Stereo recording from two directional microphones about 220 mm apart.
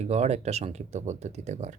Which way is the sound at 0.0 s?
30° right (ahead or behind).